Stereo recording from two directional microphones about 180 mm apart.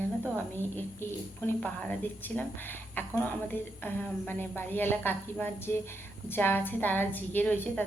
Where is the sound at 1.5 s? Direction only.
5° left (ahead or behind).